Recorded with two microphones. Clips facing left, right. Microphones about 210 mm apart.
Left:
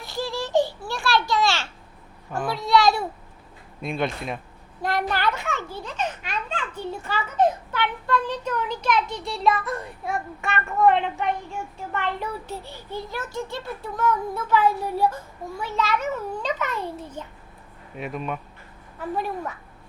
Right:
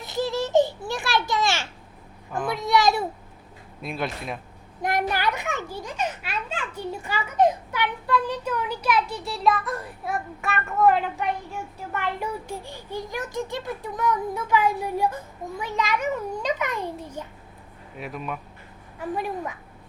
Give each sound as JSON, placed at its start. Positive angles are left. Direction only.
{"t": 0.0, "sound": "a sound", "side_deg": -20}
{"t": 2.5, "sound": "a child's voice", "side_deg": -20}
{"t": 3.8, "sound": "speech", "side_deg": 0}
{"t": 4.8, "sound": "a child's voice", "side_deg": -20}
{"t": 17.9, "sound": "speech", "side_deg": 0}
{"t": 18.9, "sound": "a child's voice", "side_deg": -15}